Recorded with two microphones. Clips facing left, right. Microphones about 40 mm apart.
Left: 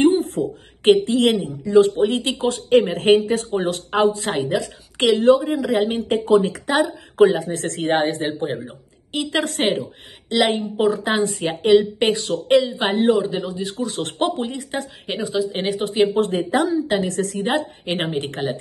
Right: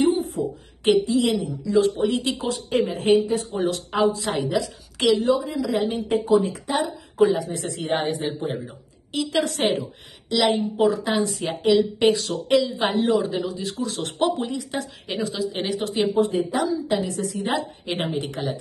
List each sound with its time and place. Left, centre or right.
0.0 s a woman's voice: left
3.5 s speech: left
6.2 s speech: left
8.6 s a woman's voice: left
12.2 s speech: centre
12.5 s a woman's voice: left
13.6 s speech: centre
14.2 s speech: left
15.2 s a woman's voice: centre
15.5 s a woman's voice: left
16.1 s a woman's voice: left
16.5 s a woman's voice: left
17.6 s speech: left